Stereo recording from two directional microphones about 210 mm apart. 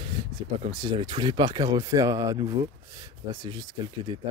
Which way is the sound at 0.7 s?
20° right (ahead or behind).